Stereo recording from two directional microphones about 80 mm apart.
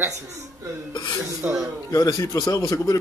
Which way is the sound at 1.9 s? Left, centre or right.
Left.